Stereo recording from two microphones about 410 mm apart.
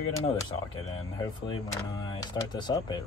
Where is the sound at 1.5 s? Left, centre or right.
Centre.